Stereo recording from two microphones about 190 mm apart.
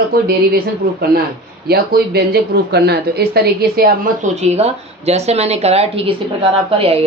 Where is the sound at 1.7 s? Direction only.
55° right (ahead or behind).